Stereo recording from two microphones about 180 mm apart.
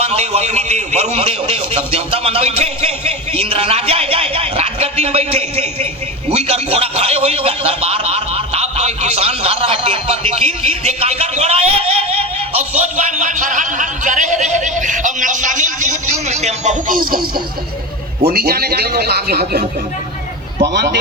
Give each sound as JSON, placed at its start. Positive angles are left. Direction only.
{"t": 0.0, "sound": "a man's voice", "side_deg": -35}
{"t": 18.3, "sound": "speech", "side_deg": -60}